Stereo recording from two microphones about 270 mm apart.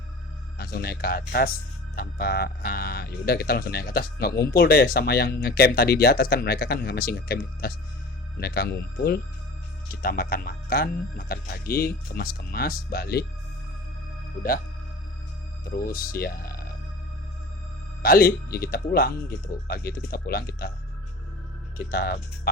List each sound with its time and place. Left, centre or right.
0.6 s speech: left
15.6 s speech: left
18.0 s speech: left
21.8 s speech: left